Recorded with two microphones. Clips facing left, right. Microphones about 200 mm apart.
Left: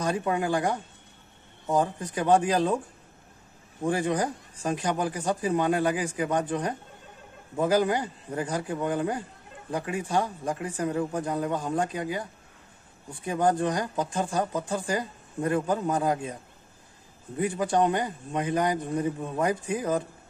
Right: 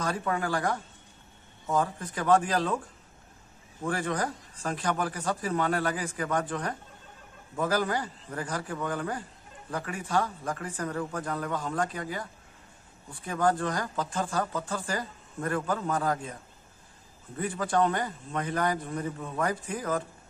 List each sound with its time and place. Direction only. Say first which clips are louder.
0.0 s speech: left 3 dB; 20° left (ahead or behind)
3.8 s a man's voice: left 4 dB; 15° left (ahead or behind)
17.4 s speech: left 2 dB; 20° left (ahead or behind)